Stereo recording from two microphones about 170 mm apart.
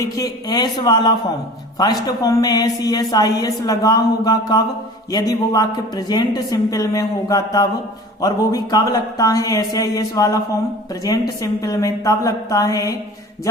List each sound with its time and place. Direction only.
0.0 s a woman's voice: 20° left (ahead or behind)